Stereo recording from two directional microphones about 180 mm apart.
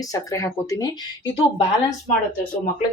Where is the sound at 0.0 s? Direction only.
20° left (ahead or behind).